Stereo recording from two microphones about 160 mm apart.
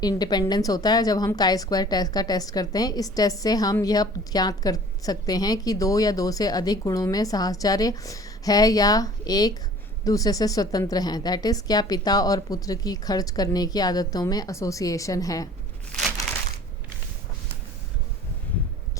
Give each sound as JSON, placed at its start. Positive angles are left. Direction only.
{"t": 0.0, "sound": "a woman's voice", "side_deg": 25}